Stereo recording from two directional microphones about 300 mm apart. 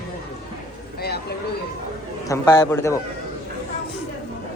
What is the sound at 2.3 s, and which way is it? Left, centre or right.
Speech, centre.